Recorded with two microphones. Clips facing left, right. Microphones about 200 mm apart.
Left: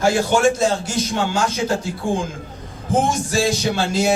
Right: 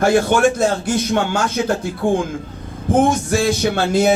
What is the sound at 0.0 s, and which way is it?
A man's voice, 55° right (ahead or behind).